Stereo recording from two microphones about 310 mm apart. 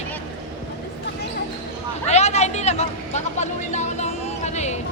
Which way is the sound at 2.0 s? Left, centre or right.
Left.